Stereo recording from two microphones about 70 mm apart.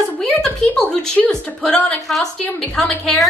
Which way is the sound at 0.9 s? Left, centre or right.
Centre.